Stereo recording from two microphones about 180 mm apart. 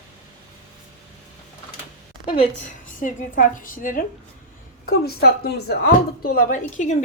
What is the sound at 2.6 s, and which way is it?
A woman's voice, 45° left (ahead or behind).